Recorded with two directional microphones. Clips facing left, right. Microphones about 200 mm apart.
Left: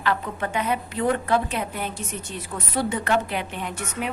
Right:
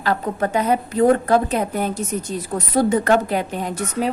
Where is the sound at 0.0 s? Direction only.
40° right (ahead or behind).